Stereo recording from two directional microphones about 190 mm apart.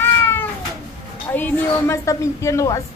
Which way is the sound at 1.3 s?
10° left (ahead or behind).